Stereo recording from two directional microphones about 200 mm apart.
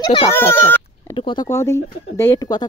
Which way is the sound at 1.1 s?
25° left (ahead or behind).